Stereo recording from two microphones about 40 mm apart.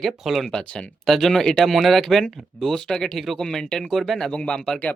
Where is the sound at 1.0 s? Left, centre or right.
Centre.